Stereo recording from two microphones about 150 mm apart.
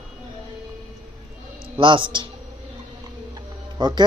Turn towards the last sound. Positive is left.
turn(degrees=-30)  # may be behind; listen again after turning